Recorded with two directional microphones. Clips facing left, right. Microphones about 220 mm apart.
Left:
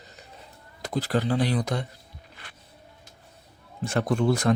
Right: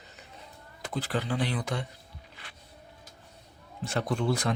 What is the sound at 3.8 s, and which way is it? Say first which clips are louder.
Speech: left 5 dB; 50° left (ahead or behind).